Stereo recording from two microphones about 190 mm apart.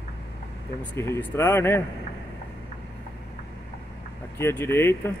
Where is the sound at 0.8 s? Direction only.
15° left (ahead or behind).